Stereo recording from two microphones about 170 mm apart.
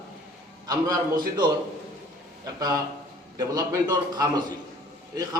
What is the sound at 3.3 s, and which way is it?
A man's voice, 20° right (ahead or behind).